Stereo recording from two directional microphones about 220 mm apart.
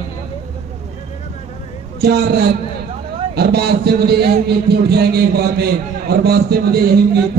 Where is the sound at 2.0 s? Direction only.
45° right (ahead or behind).